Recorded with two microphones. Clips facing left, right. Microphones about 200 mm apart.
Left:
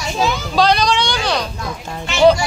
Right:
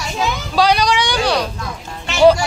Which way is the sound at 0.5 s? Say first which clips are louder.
Right 1 dB; 10° right (ahead or behind).